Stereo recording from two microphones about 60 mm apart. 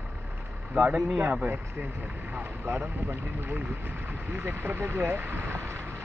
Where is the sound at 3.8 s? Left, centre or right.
Right.